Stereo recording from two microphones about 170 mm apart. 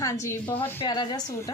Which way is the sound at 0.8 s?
25° left (ahead or behind).